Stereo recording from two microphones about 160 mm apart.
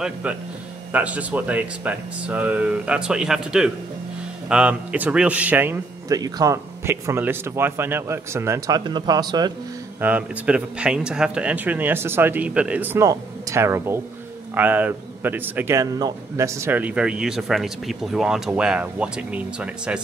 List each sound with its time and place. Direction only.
0.0 s a man's voice: 10° right (ahead or behind)
6.1 s speech: 25° right (ahead or behind)
9.9 s a man's voice: 10° right (ahead or behind)